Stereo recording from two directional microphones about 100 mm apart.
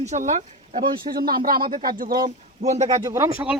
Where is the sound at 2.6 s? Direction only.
90° right.